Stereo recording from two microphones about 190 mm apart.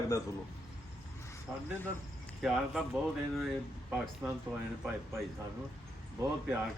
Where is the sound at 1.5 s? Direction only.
5° right (ahead or behind).